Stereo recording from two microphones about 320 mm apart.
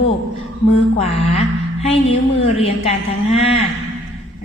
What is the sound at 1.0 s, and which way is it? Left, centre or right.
A woman's voice, centre.